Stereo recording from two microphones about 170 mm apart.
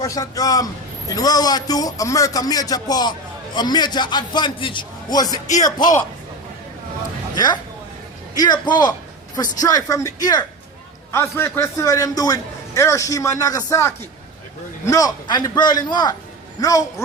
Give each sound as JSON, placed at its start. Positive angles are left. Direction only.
{"t": 0.0, "sound": "a man's voice", "side_deg": 20}
{"t": 7.3, "sound": "a man's voice", "side_deg": 25}